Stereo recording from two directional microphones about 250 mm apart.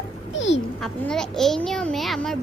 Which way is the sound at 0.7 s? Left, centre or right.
Centre.